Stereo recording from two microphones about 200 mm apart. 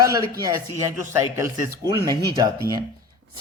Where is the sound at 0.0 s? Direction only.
20° right (ahead or behind).